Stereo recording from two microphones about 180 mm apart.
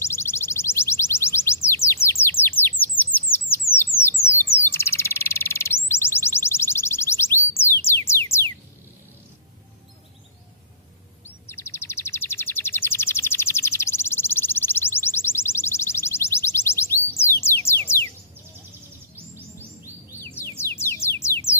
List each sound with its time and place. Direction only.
0.0 s music: 15° left (ahead or behind)
3.0 s chirp: 10° left (ahead or behind)
3.7 s bird: 55° left (ahead or behind)
4.6 s bird: 15° left (ahead or behind)
5.9 s music: 15° left (ahead or behind)
11.4 s chirp: 15° left (ahead or behind)
17.2 s a sound: 15° left (ahead or behind)
20.3 s music: 15° left (ahead or behind)